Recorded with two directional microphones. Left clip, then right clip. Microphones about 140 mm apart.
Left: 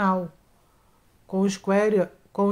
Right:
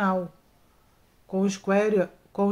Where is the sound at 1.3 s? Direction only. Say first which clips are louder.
Left 1 dB; 30° left (ahead or behind).